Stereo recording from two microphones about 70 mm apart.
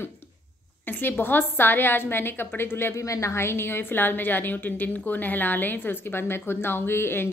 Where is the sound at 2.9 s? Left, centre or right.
Left.